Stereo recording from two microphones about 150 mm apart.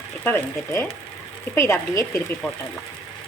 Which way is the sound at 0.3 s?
15° left (ahead or behind).